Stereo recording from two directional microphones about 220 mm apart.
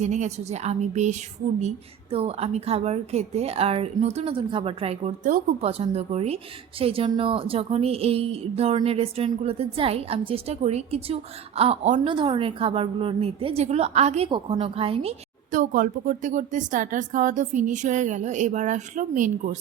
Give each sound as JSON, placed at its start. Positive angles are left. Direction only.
{"t": 0.0, "sound": "a woman's voice", "side_deg": -30}
{"t": 15.5, "sound": "speech", "side_deg": -35}